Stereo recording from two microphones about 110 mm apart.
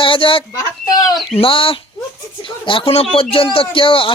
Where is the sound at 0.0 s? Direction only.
55° left (ahead or behind).